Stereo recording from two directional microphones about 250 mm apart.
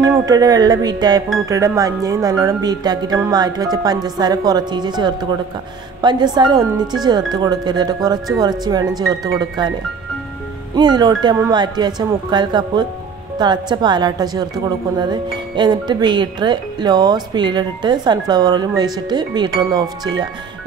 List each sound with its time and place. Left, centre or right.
0.0 s a woman's voice: centre
10.8 s a woman's voice: centre